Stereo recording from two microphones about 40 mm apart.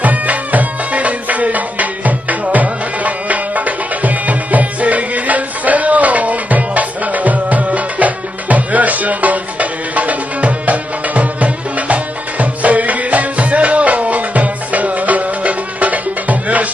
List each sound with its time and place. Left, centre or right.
0.0 s music: right